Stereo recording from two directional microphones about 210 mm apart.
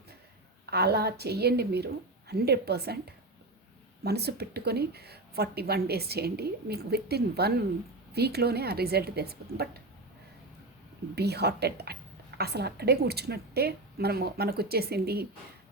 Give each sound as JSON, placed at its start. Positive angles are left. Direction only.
{"t": 0.6, "sound": "speech", "side_deg": -50}
{"t": 4.0, "sound": "speech", "side_deg": -50}
{"t": 11.1, "sound": "speech", "side_deg": -50}